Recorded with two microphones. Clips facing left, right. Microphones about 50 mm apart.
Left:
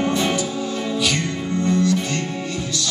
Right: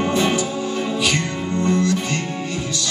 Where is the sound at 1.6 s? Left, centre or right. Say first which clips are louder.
Even; right.